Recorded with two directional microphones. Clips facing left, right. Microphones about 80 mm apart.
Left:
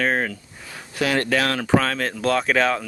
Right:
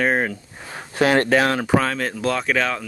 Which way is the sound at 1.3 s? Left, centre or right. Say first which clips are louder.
Right 4 dB; right.